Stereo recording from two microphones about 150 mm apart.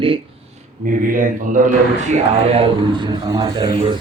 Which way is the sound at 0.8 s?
65° right (ahead or behind).